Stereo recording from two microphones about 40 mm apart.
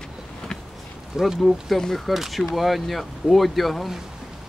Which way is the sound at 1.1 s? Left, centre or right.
Centre.